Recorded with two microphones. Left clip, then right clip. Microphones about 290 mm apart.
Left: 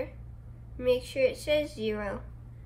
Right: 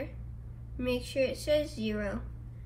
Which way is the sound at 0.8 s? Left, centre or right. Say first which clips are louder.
Left 5 dB; left.